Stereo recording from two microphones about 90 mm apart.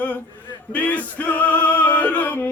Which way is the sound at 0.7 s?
15° left (ahead or behind).